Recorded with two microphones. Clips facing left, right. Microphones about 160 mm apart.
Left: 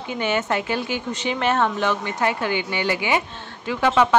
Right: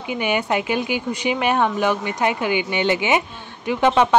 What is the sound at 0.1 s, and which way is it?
Speech, 15° right (ahead or behind).